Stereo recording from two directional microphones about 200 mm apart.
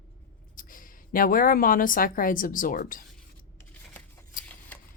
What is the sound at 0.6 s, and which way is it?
A woman's voice, 45° left (ahead or behind).